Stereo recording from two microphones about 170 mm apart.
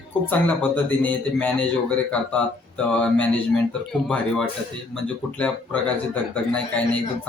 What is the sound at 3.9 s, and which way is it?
A man's voice, 5° left (ahead or behind).